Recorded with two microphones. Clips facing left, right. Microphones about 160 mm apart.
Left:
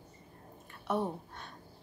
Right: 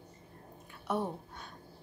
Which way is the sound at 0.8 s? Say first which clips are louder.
Left 1 dB; centre (ahead or behind).